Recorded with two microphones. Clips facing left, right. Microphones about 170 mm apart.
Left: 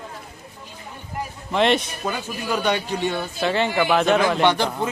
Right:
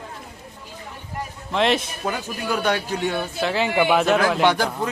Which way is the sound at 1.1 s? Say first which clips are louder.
Left 1 dB; centre (ahead or behind).